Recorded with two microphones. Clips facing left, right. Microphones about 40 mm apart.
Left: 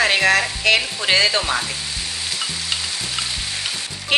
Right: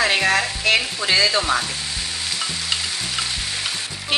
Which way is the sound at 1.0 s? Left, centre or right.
Left.